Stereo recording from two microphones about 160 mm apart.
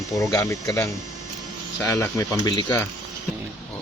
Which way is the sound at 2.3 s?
25° left (ahead or behind).